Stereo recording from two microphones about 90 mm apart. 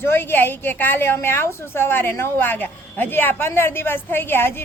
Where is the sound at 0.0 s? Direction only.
25° left (ahead or behind).